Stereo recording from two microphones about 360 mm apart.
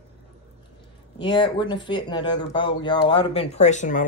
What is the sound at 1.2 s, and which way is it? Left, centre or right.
Speech, centre.